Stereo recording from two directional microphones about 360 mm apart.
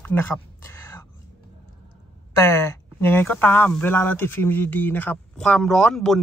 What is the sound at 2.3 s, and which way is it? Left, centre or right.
Speech, centre.